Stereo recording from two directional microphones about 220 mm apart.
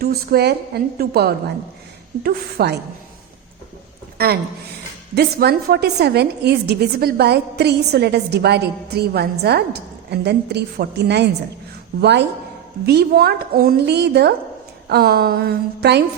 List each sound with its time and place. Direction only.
0.0 s a woman's voice: 45° right (ahead or behind)
5.1 s a woman's voice: 45° right (ahead or behind)